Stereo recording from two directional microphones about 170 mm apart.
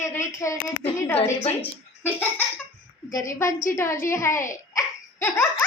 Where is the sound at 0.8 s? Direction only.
35° left (ahead or behind).